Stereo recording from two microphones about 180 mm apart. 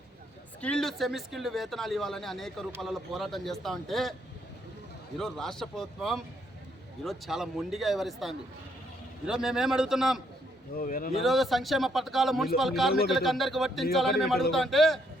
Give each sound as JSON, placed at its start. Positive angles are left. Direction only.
{"t": 0.6, "sound": "speech", "side_deg": 5}
{"t": 5.1, "sound": "speech", "side_deg": 0}
{"t": 10.8, "sound": "a man's voice", "side_deg": 50}
{"t": 11.2, "sound": "speech", "side_deg": 0}